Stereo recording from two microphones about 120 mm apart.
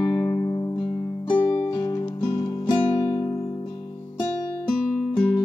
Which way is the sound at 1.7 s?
30° left (ahead or behind).